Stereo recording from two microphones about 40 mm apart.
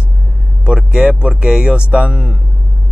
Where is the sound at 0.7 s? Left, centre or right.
Right.